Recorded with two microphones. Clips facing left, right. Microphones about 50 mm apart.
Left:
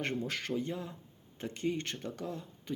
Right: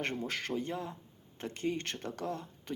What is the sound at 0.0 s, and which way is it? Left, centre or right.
Speech, right.